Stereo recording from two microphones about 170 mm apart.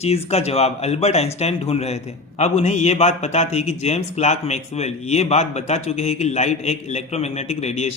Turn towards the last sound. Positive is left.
turn(degrees=40)  # may be behind; listen again after turning